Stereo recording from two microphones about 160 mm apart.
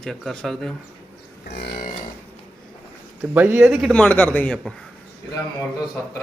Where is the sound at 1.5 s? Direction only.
85° left.